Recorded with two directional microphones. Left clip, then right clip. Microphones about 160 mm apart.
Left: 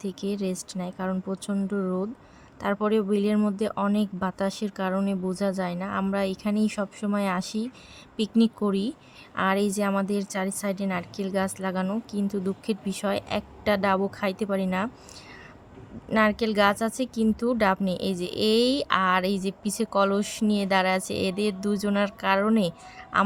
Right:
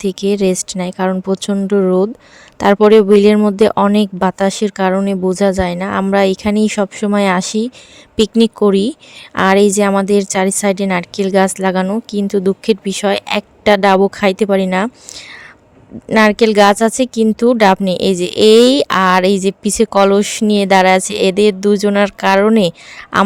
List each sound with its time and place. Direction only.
0.0 s speech: 55° right (ahead or behind)